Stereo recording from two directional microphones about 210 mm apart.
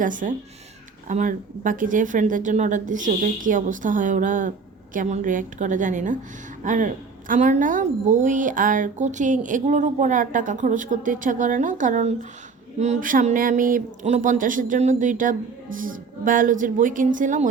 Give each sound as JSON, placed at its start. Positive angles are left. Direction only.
{"t": 0.0, "sound": "a woman's voice", "side_deg": -40}